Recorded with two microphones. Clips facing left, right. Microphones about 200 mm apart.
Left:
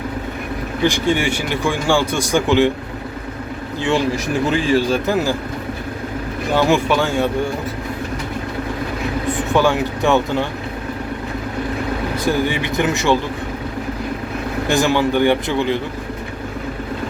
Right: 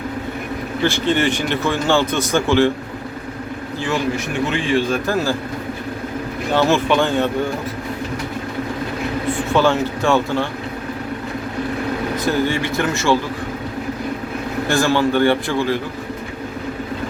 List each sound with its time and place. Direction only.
0.8 s speech: 15° left (ahead or behind)
4.5 s speech: 35° left (ahead or behind)
5.0 s speech: 15° left (ahead or behind)
6.5 s speech: 15° left (ahead or behind)
9.5 s speech: 15° left (ahead or behind)
12.1 s speech: 15° left (ahead or behind)
14.7 s speech: 20° left (ahead or behind)